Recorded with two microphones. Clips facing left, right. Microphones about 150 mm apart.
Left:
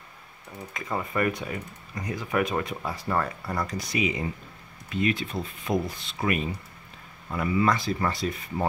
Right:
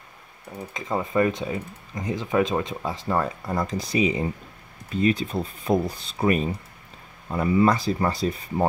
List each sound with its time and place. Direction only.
0.7 s speech: 20° right (ahead or behind)